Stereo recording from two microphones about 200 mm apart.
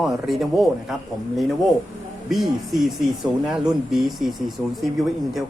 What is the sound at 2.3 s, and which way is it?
Speech, centre (ahead or behind).